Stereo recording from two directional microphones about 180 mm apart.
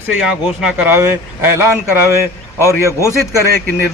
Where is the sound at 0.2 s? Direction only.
5° right (ahead or behind).